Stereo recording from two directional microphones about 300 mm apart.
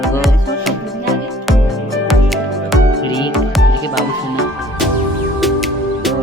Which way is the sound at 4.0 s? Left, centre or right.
Centre.